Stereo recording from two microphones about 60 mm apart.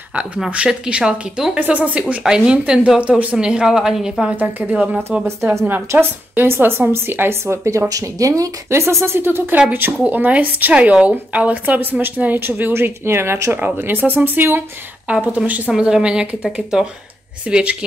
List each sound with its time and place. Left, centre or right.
0.7 s speech: centre
4.4 s speech: right
4.7 s speech: centre
5.2 s speech: right
7.9 s speech: right
8.6 s speech: right
15.2 s speech: right
15.7 s speech: centre